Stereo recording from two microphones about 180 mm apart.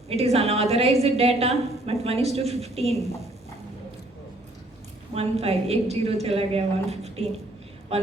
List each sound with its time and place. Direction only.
0.1 s a woman's voice: 35° right (ahead or behind)
5.1 s a woman's voice: 35° right (ahead or behind)